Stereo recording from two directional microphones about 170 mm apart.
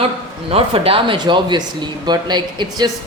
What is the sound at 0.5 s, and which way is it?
Speech, 30° right (ahead or behind).